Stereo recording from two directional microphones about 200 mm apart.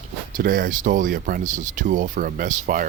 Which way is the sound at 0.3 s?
45° right (ahead or behind).